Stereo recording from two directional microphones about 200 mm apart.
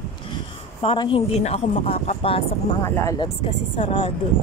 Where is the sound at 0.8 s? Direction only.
25° left (ahead or behind).